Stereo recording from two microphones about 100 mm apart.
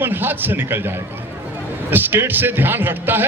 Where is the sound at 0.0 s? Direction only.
20° right (ahead or behind).